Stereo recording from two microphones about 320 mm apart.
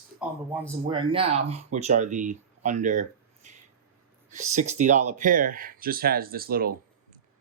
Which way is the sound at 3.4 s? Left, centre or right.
Right.